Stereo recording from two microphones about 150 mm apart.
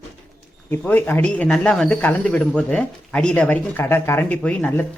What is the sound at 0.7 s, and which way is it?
Speech, 10° left (ahead or behind).